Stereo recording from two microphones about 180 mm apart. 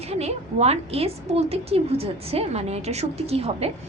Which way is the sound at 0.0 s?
35° right (ahead or behind).